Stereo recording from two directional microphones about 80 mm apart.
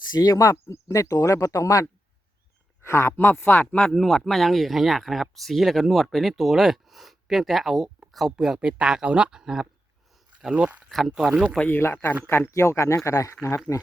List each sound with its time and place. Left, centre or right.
0.1 s speech: left
3.8 s speech: centre
10.5 s speech: centre
10.8 s speech: centre
11.7 s speech: left